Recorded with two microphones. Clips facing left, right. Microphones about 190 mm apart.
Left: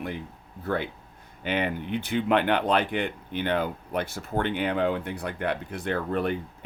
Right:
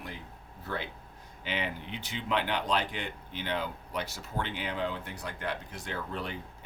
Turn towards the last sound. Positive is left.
turn(degrees=55)  # may be behind; listen again after turning